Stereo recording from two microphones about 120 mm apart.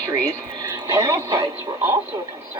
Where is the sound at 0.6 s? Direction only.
25° right (ahead or behind).